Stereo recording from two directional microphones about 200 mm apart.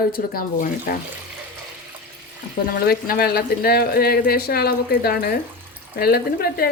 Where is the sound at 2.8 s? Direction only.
50° left (ahead or behind).